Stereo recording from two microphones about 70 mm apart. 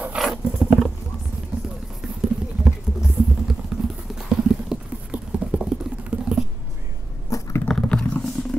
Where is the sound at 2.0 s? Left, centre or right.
Centre.